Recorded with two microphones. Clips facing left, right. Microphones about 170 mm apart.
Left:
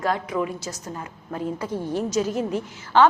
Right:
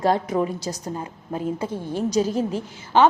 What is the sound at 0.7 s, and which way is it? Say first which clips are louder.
A woman's voice: right 4 dB; 25° right (ahead or behind).